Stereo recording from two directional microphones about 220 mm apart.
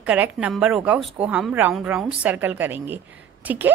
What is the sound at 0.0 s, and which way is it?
Speech, 5° right (ahead or behind).